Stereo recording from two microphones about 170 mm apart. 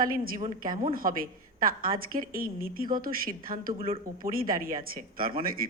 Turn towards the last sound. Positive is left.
turn(degrees=-55)  # may be behind; listen again after turning